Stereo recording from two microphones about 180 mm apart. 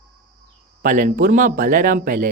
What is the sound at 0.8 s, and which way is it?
Speech, 45° right (ahead or behind).